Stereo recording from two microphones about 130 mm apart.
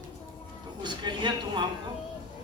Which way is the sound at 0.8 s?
35° right (ahead or behind).